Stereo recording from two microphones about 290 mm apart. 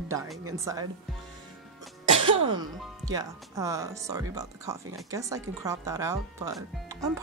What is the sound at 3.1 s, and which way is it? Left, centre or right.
Speech, centre.